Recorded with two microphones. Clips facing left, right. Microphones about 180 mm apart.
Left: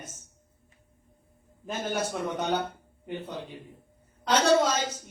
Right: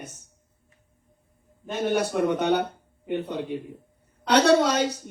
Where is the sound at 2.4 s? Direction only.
65° right (ahead or behind).